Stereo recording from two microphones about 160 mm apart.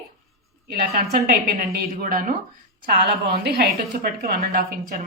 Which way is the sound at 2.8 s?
80° right.